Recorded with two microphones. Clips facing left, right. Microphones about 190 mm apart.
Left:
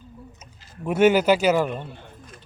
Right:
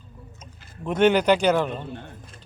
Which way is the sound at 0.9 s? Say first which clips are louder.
Left 1 dB; 5° left (ahead or behind).